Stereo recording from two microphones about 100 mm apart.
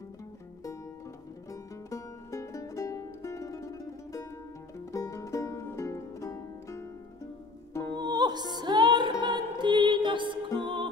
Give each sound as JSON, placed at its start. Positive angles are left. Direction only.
{"t": 1.5, "sound": "music", "side_deg": 30}
{"t": 8.0, "sound": "music", "side_deg": -45}